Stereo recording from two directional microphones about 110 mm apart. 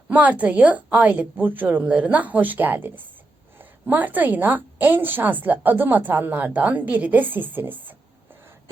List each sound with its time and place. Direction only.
0.1 s a woman's voice: 15° right (ahead or behind)